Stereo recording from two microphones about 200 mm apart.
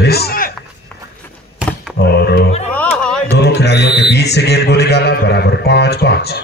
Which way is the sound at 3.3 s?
55° left (ahead or behind).